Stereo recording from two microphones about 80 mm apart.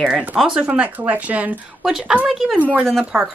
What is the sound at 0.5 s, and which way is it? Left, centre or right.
Speech, centre.